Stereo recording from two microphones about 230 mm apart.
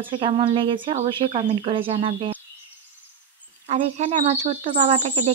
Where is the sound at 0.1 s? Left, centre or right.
Right.